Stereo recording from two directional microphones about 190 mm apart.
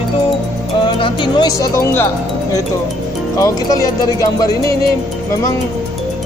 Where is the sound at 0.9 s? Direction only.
25° left (ahead or behind).